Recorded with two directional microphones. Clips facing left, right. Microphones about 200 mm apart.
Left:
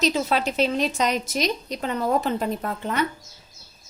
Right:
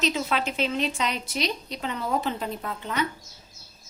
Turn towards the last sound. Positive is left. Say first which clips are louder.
# left 4 dB
turn(degrees=50)  # may be behind; listen again after turning